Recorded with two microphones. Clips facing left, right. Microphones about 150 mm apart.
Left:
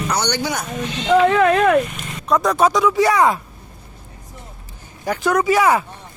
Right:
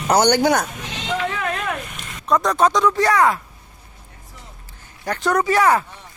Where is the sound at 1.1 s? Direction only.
90° left.